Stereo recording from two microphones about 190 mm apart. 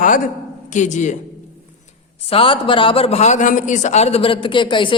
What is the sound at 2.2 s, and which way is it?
A man's voice, 30° left (ahead or behind).